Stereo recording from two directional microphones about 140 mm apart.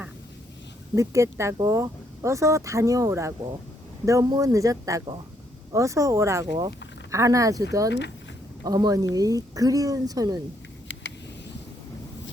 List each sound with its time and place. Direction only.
0.9 s speech: 20° right (ahead or behind)